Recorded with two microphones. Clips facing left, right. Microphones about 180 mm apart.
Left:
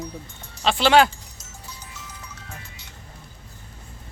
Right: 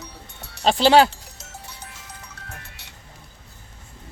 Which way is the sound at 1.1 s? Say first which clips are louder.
Right 4 dB; 65° right (ahead or behind).